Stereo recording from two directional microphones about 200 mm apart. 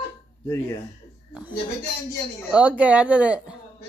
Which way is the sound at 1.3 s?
5° right (ahead or behind).